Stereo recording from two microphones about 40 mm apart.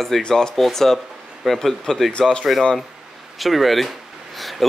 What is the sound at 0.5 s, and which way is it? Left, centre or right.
Speech, centre.